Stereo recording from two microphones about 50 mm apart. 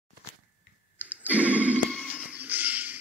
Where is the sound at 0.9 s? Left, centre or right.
Right.